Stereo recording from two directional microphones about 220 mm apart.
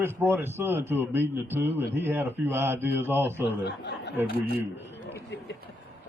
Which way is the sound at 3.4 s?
50° left (ahead or behind).